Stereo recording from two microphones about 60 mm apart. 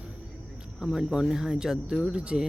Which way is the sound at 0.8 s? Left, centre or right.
Centre.